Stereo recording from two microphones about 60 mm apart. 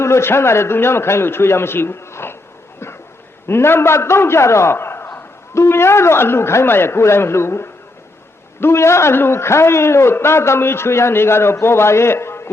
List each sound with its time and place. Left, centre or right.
0.0 s a man's voice: left
3.4 s a man's voice: left